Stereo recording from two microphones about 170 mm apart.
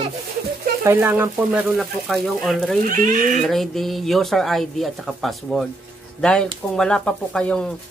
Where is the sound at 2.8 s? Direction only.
55° right (ahead or behind).